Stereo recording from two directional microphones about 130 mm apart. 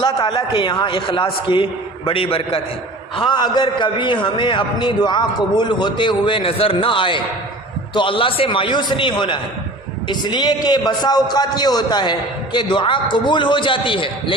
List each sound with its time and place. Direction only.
0.0 s a man's voice: 35° left (ahead or behind)
3.2 s a man's voice: 35° left (ahead or behind)